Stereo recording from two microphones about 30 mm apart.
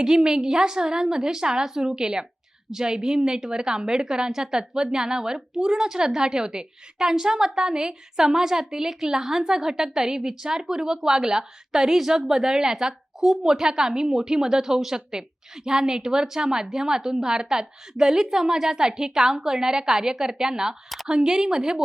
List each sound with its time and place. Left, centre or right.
0.0 s a woman's voice: right